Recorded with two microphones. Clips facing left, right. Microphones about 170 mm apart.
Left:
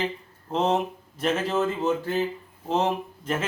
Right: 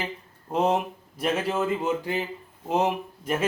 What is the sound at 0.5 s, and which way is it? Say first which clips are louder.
Speech: even; 10° right (ahead or behind).